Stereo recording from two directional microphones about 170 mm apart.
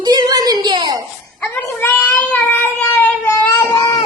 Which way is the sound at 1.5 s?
10° left (ahead or behind).